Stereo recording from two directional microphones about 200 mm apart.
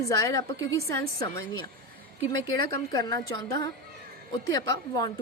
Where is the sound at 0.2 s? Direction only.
20° left (ahead or behind).